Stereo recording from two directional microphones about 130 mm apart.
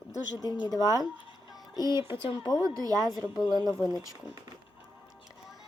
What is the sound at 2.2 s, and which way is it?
Speech, 35° left (ahead or behind).